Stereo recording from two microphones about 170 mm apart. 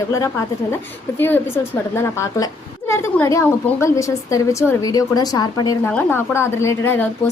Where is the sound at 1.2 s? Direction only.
15° left (ahead or behind).